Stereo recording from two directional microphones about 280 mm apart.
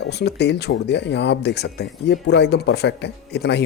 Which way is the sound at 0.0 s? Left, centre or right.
Left.